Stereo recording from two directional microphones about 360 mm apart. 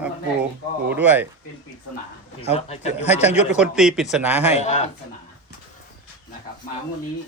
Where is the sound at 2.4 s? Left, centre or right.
Centre.